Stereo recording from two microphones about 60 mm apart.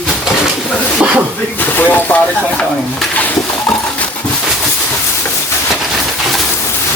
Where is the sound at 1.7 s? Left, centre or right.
Left.